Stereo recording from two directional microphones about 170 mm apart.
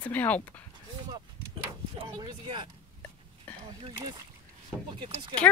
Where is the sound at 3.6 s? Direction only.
25° right (ahead or behind).